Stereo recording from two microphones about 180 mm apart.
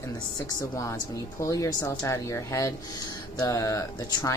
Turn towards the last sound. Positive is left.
turn(degrees=20)  # may be behind; listen again after turning